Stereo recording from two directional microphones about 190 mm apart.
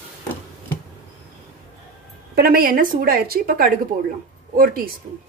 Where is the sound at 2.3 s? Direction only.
50° right (ahead or behind).